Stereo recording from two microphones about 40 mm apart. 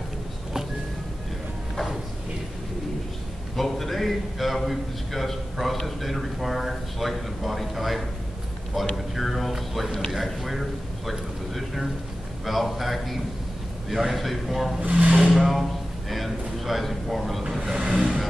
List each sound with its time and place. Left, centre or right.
3.5 s a man's voice: centre
10.1 s a sound: centre
12.4 s a man's voice: centre
14.8 s speech: right
15.3 s a sound: centre
17.6 s vehicle: centre